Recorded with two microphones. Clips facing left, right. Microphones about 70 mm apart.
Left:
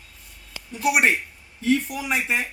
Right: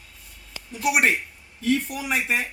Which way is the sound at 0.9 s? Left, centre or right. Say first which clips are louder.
Left 1 dB; centre.